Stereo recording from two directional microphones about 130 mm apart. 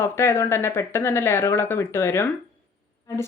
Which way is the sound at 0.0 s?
20° left (ahead or behind).